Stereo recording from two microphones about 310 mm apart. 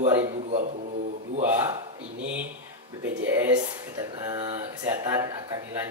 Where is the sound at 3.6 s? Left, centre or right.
Centre.